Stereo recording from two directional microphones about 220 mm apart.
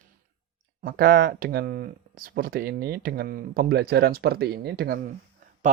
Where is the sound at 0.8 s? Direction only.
40° right (ahead or behind).